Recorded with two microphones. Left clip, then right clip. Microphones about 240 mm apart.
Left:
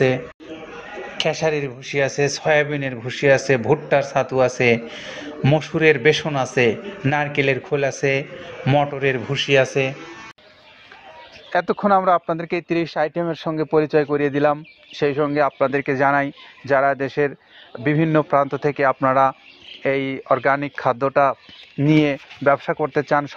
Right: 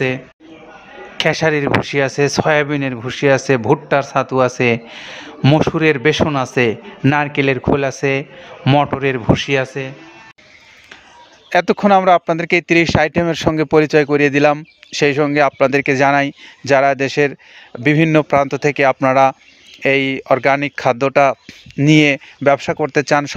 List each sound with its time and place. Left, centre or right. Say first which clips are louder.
1.1 s speech: right 5 dB; right; by 9.9 s centre
11.5 s speech: right 5 dB; right